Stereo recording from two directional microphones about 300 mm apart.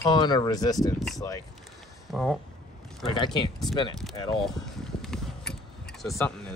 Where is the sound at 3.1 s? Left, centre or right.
Centre.